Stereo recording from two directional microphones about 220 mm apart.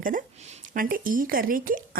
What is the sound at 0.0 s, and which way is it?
Speech, 35° right (ahead or behind).